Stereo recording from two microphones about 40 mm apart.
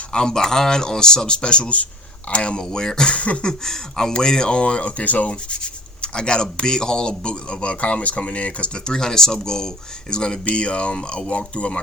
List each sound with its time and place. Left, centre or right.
0.1 s speech: centre
3.2 s a sound: left
3.4 s speech: centre; by 5.3 s left
5.3 s speech: left